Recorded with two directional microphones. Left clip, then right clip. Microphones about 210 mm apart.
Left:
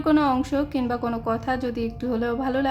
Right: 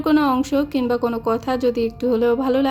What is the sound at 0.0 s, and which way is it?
A woman's voice, 20° right (ahead or behind).